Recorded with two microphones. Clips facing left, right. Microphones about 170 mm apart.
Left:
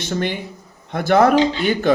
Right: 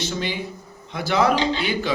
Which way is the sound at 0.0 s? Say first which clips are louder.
Left 4 dB; 55° left (ahead or behind).